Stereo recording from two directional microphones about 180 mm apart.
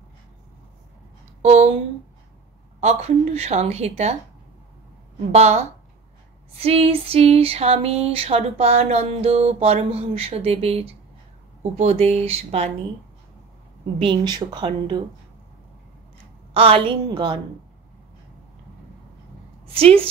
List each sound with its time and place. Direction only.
1.4 s speech: 40° right (ahead or behind)
2.8 s a sound: 35° right (ahead or behind)
5.3 s a sound: 35° right (ahead or behind)
13.9 s speech: 30° right (ahead or behind)
16.5 s speech: 30° right (ahead or behind)
19.6 s a woman's voice: 30° right (ahead or behind)